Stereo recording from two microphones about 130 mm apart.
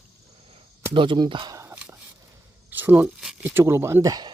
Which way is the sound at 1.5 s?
20° right (ahead or behind).